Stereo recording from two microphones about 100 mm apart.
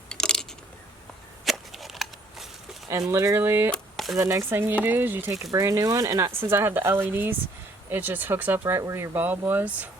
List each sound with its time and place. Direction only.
0.1 s coin: 5° left (ahead or behind)
1.5 s a sound: centre (ahead or behind)
3.1 s speech: 25° right (ahead or behind)
3.7 s a sound: centre (ahead or behind)
4.2 s speech: 25° right (ahead or behind)
5.3 s speech: 30° right (ahead or behind)
6.4 s speech: 25° right (ahead or behind)